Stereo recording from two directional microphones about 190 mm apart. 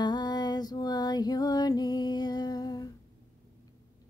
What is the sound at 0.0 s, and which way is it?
Music, 20° left (ahead or behind).